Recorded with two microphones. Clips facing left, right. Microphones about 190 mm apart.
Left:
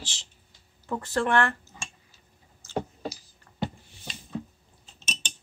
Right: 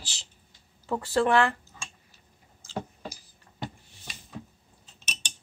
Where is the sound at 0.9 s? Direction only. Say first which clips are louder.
Right 2 dB; 10° right (ahead or behind).